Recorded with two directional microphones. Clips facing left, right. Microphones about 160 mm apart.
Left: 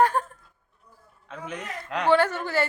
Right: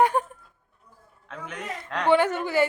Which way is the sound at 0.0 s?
15° right (ahead or behind).